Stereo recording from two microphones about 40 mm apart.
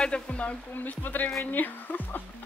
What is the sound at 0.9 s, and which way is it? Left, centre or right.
Speech, left.